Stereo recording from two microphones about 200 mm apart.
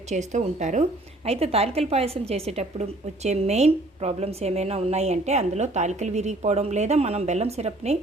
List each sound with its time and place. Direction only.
0.1 s a woman's voice: 35° right (ahead or behind)